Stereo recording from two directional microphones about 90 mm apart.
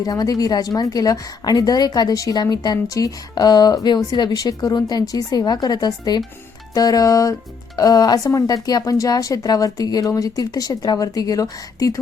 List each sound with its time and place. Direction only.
0.0 s a woman's voice: 45° left (ahead or behind)
6.7 s music: 40° left (ahead or behind)
7.8 s a woman's voice: 45° left (ahead or behind)